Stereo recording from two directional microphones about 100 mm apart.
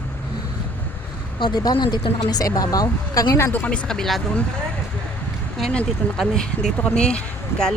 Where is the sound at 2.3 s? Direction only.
40° left (ahead or behind).